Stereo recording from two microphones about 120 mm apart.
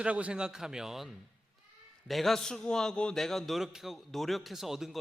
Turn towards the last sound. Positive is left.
turn(degrees=0)  # may be behind; listen again after turning